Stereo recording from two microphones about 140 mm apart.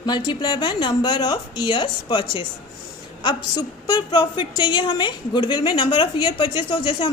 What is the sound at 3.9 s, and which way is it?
A woman's voice, 30° left (ahead or behind).